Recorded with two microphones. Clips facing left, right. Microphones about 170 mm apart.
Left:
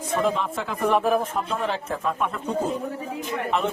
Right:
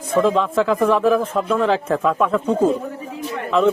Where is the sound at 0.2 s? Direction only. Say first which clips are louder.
Right 10 dB; 90° right.